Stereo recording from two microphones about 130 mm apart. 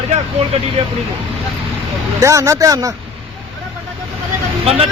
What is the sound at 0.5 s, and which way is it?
Speech, 50° right (ahead or behind).